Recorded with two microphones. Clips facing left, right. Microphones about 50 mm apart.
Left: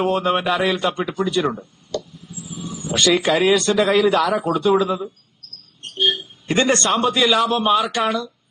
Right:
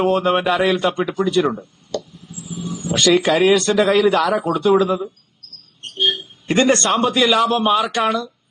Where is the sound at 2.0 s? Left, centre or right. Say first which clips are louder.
Right 1 dB; centre.